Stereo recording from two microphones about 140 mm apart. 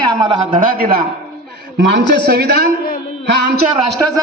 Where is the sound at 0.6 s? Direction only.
90° right.